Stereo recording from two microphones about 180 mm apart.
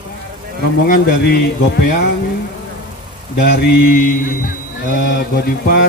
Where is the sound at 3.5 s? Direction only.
55° left (ahead or behind).